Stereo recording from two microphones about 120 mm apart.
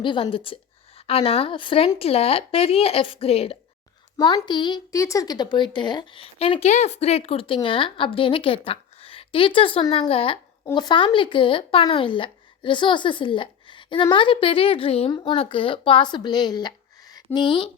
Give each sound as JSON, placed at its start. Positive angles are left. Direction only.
{"t": 0.0, "sound": "a woman's voice", "side_deg": 45}
{"t": 4.2, "sound": "a child's voice", "side_deg": 35}
{"t": 4.9, "sound": "a woman's voice", "side_deg": 25}